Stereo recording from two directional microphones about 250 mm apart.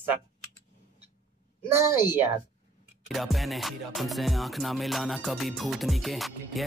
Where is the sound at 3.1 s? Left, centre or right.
Centre.